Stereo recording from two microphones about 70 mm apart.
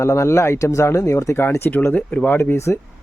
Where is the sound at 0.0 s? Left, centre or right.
Left; by 2.3 s centre.